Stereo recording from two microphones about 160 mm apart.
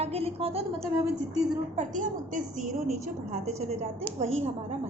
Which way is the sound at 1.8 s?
55° right (ahead or behind).